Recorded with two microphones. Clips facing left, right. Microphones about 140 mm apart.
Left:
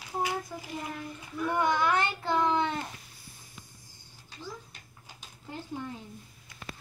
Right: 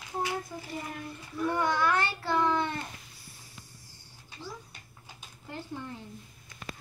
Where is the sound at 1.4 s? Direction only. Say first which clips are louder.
Left 1 dB; 15° left (ahead or behind).